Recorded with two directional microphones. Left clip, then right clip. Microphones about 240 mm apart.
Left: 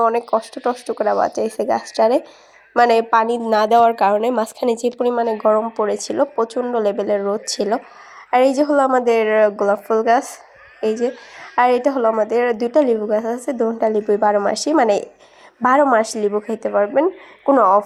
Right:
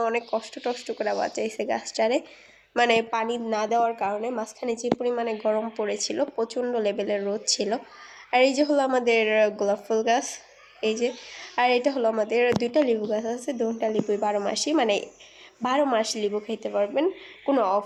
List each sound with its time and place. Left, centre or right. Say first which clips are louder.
0.0 s a woman's voice: left 9 dB; left